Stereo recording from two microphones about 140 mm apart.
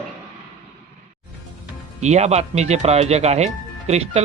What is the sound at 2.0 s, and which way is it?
Speech, 55° right (ahead or behind).